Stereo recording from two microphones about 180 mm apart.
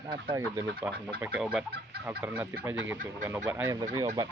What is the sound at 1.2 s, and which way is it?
Speech, 5° right (ahead or behind).